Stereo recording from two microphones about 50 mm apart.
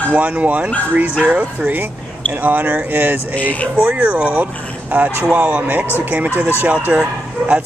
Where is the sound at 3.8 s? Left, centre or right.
Right.